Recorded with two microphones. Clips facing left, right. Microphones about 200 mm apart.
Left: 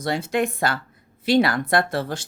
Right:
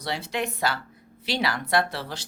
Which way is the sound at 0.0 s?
50° left (ahead or behind).